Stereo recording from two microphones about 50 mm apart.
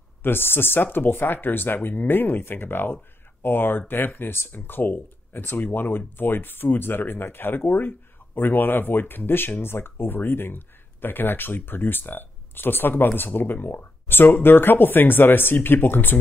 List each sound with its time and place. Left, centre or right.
0.2 s speech: left